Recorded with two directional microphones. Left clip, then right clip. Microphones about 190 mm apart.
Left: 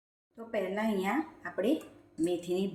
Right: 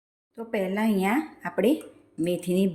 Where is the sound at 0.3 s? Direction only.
50° right (ahead or behind).